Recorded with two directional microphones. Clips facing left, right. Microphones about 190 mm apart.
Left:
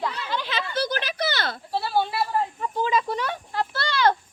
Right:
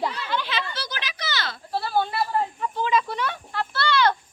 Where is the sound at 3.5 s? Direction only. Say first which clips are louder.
Right 3 dB; 40° left (ahead or behind).